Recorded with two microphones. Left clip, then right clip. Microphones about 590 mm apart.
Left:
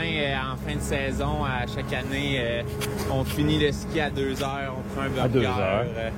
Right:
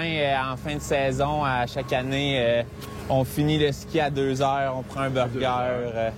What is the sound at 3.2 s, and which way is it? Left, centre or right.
Speech, right.